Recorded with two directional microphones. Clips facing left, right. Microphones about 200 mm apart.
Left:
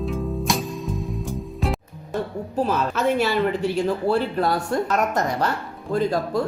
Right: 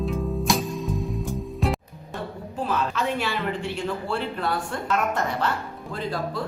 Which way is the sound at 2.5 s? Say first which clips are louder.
Left 4 dB; 40° left (ahead or behind).